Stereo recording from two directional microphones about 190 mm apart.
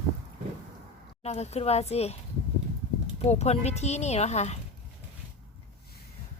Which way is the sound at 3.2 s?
35° left (ahead or behind).